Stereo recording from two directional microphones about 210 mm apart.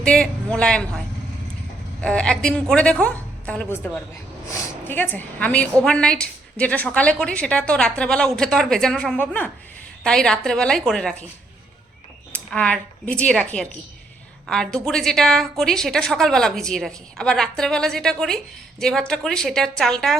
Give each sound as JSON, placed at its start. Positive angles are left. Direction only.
{"t": 0.0, "sound": "a man's voice", "side_deg": 5}
{"t": 12.3, "sound": "a woman's voice", "side_deg": 5}